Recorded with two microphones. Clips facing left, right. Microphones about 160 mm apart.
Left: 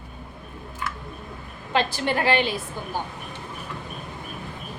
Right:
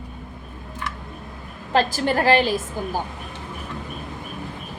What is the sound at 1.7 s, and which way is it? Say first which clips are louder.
Speech: right 4 dB; 40° right (ahead or behind).